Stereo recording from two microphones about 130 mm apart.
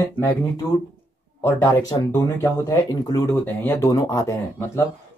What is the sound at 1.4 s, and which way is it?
Speech, 25° left (ahead or behind).